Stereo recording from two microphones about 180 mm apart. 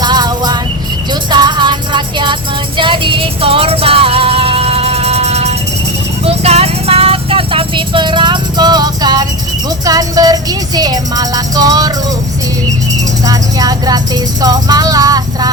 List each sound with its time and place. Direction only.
0.0 s music: 20° right (ahead or behind)
13.2 s music: 20° right (ahead or behind)